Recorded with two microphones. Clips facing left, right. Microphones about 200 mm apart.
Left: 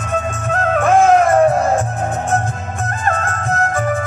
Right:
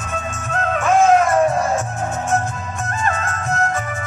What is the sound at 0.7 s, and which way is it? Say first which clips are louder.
Music: left 2 dB; 55° left (ahead or behind).